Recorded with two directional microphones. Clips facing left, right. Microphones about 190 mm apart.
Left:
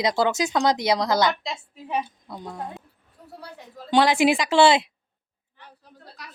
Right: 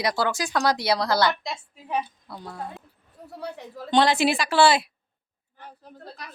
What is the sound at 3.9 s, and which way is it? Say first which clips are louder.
A woman's voice: left 2 dB; 10° left (ahead or behind).